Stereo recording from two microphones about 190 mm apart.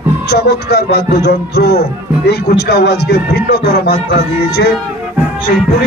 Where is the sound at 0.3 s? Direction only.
60° left (ahead or behind).